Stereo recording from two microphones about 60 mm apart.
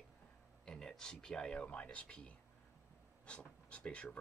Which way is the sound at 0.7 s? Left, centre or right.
Centre.